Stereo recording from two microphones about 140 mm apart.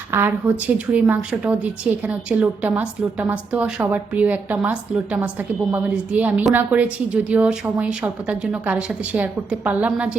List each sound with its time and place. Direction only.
0.1 s a woman's voice: 15° right (ahead or behind)